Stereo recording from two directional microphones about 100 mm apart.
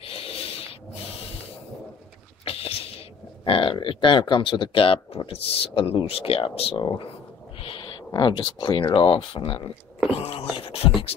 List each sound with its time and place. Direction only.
0.0 s a sound: 70° left (ahead or behind)
2.4 s a sound: 75° left (ahead or behind)
3.4 s speech: 60° left (ahead or behind)
6.8 s speech: 50° left (ahead or behind); by 9.6 s 70° left (ahead or behind)
10.1 s wail: 80° left
10.5 s beatboxing: 70° left (ahead or behind)